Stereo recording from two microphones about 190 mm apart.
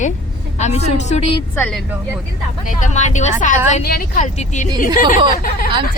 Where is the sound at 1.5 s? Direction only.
5° left (ahead or behind).